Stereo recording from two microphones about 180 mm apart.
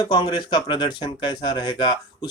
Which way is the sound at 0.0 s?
25° left (ahead or behind).